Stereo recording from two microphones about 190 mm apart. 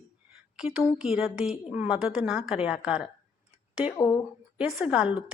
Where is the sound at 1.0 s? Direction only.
5° right (ahead or behind).